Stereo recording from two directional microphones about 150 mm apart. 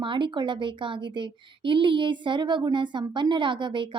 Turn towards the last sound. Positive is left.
turn(degrees=-35)  # may be behind; listen again after turning